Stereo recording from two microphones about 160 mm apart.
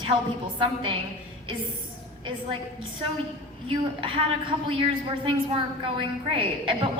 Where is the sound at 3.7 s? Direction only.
30° right (ahead or behind).